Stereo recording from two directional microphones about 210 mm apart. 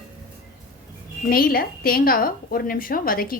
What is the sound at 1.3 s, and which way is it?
A woman's voice, 45° left (ahead or behind).